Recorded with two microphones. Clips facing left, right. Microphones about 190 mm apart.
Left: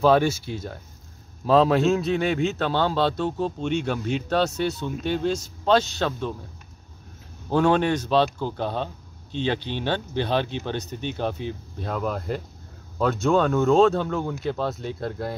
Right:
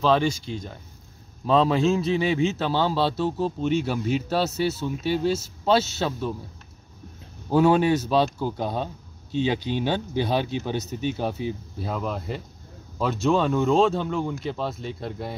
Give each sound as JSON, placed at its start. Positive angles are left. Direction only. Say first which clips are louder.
{"t": 0.0, "sound": "a man's voice", "louder": "left 3 dB", "side_deg": 5}
{"t": 7.4, "sound": "a man's voice", "louder": "right 2 dB", "side_deg": -5}